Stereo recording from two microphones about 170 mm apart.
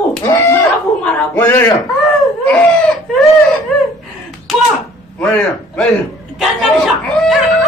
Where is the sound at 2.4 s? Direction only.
10° left (ahead or behind).